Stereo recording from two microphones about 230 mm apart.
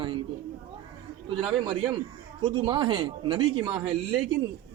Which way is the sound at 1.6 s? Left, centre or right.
Right.